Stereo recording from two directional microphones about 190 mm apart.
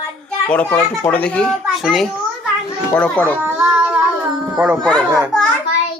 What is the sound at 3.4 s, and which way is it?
Child singing, 10° right (ahead or behind).